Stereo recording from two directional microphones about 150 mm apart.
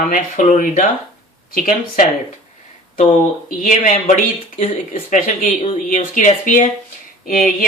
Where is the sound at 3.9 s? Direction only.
50° left (ahead or behind).